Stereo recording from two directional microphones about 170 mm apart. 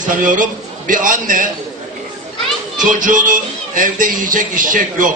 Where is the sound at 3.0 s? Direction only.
50° right (ahead or behind).